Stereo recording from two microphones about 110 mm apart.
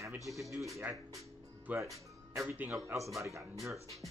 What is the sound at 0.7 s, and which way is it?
Speech, 30° right (ahead or behind).